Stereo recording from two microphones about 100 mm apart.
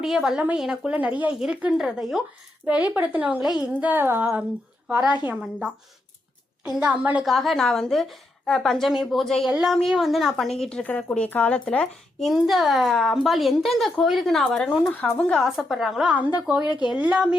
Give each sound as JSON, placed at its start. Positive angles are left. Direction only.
{"t": 0.0, "sound": "speech", "side_deg": -5}
{"t": 3.6, "sound": "a sound", "side_deg": -15}
{"t": 4.9, "sound": "speech", "side_deg": -15}
{"t": 7.3, "sound": "speech", "side_deg": 0}
{"t": 12.3, "sound": "speech", "side_deg": 0}
{"t": 15.4, "sound": "speech", "side_deg": -5}
{"t": 16.1, "sound": "speech", "side_deg": -15}